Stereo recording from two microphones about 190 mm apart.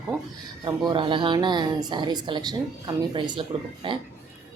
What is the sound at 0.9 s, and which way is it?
Speech, 25° right (ahead or behind).